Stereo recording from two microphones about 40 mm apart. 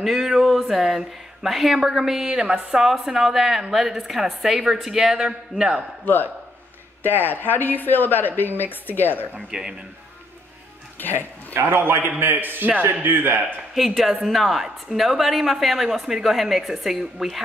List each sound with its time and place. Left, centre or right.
0.0 s speech: centre
2.8 s a woman's voice: centre
6.0 s speech: left
9.5 s speech: centre
11.0 s speech: left
11.5 s a man's voice: right
13.7 s a woman's voice: centre